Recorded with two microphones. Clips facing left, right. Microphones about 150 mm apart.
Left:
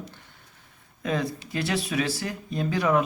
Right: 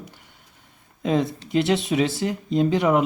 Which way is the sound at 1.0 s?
25° right (ahead or behind).